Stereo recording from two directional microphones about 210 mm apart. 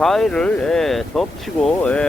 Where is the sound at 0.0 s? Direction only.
Centre (ahead or behind).